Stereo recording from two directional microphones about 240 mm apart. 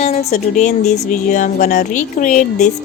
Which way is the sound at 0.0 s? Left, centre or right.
Left.